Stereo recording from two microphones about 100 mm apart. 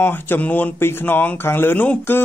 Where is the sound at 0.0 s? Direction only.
20° left (ahead or behind).